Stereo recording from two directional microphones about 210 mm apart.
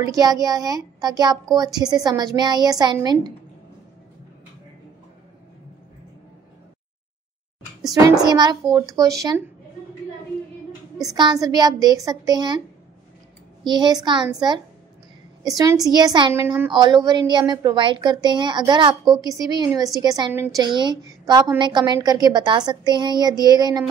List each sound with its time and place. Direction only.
0.0 s a woman's voice: 15° right (ahead or behind)
7.8 s a woman's voice: 15° right (ahead or behind)
11.1 s a woman's voice: 20° right (ahead or behind)
13.7 s a woman's voice: 20° right (ahead or behind)
16.7 s a woman's voice: 20° right (ahead or behind)